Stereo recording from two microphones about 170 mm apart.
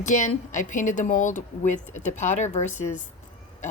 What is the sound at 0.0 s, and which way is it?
Speech, 45° left (ahead or behind).